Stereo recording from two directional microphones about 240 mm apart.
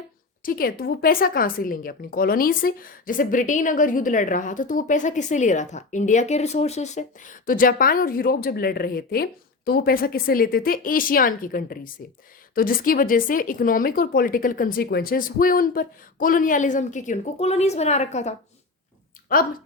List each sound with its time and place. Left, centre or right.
0.4 s a woman's voice: left